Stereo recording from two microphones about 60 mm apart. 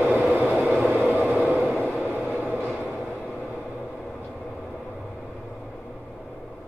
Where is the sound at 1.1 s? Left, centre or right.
Right.